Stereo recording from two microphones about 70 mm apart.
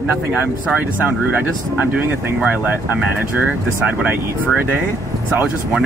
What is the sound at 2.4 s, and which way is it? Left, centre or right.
Speech, centre.